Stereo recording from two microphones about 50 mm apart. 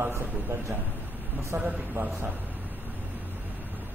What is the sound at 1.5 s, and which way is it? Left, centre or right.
Speech, right.